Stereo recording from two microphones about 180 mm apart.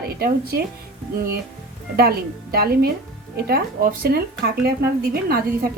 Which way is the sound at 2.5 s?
60° right (ahead or behind).